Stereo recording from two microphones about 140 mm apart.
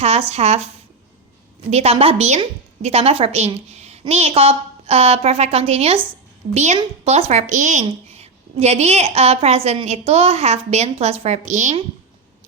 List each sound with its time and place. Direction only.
0.0 s a woman's voice: 45° right (ahead or behind)
1.7 s a woman's voice: 45° right (ahead or behind)
3.7 s a sound: 50° right (ahead or behind)
4.1 s a woman's voice: 50° right (ahead or behind)
7.9 s a woman's voice: 50° right (ahead or behind)